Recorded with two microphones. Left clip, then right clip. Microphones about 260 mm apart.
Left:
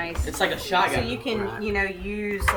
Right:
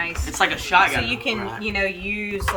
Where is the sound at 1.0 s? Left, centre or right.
Right.